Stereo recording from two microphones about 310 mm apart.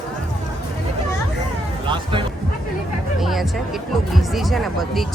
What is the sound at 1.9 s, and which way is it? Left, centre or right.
Music, centre.